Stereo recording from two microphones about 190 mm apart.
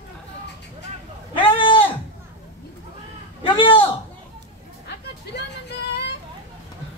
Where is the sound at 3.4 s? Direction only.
25° left (ahead or behind).